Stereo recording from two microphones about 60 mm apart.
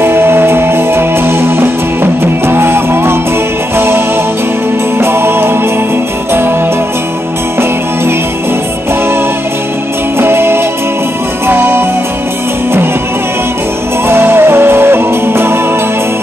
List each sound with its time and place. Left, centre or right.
0.0 s music: right
10.1 s music: right
14.0 s music: right